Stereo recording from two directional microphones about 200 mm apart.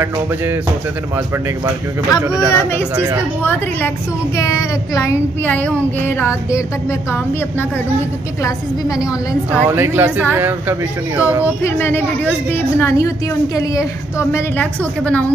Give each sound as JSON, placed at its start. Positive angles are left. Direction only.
{"t": 0.0, "sound": "a woman's voice", "side_deg": -10}
{"t": 2.0, "sound": "a woman's voice", "side_deg": 15}
{"t": 4.4, "sound": "a woman's voice", "side_deg": 15}
{"t": 9.0, "sound": "a woman's voice", "side_deg": -5}
{"t": 11.6, "sound": "a woman's voice", "side_deg": 10}